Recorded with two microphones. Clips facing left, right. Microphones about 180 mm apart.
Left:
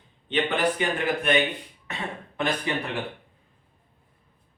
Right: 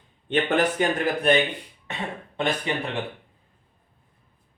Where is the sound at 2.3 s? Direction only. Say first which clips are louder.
Right 1 dB; 25° right (ahead or behind).